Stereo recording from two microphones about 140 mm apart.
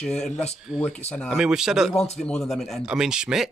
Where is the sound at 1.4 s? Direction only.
5° right (ahead or behind).